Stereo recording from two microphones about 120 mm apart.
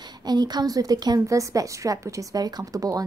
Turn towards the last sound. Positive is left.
turn(degrees=-30)  # may be behind; listen again after turning